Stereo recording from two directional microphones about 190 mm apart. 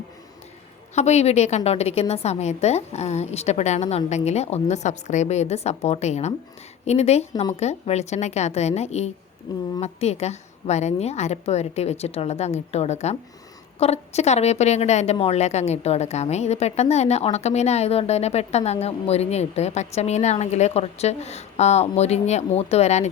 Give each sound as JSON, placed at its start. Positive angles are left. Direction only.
{"t": 0.9, "sound": "a woman's voice", "side_deg": 35}
{"t": 9.5, "sound": "speech", "side_deg": 20}
{"t": 9.8, "sound": "a woman's voice", "side_deg": 35}